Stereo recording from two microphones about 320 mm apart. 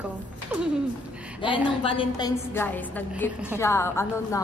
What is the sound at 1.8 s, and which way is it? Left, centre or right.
A woman's voice, centre.